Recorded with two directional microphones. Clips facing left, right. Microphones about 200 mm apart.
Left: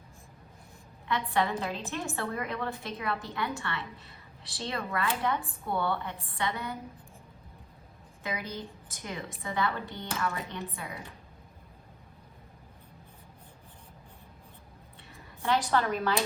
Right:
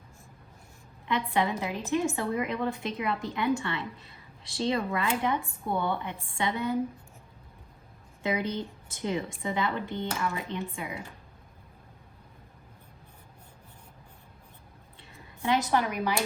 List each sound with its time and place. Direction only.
1.0 s a woman's voice: 15° right (ahead or behind)
8.2 s a woman's voice: 25° right (ahead or behind)
15.4 s a woman's voice: 15° right (ahead or behind)